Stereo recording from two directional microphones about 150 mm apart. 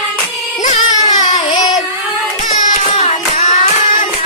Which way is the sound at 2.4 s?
55° left (ahead or behind).